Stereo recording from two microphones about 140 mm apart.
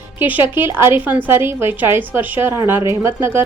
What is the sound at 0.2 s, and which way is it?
A woman's voice, 15° right (ahead or behind).